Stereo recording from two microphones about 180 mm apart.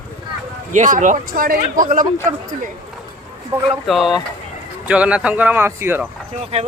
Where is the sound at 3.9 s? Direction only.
Centre (ahead or behind).